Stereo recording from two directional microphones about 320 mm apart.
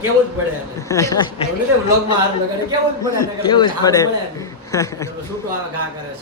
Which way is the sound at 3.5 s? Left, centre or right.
Centre.